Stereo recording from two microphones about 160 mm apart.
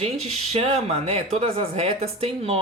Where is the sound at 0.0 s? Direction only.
40° right (ahead or behind).